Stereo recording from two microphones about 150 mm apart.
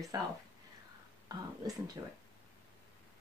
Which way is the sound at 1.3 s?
25° right (ahead or behind).